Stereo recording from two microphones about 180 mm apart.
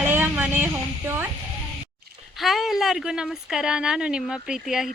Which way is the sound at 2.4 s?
Centre (ahead or behind).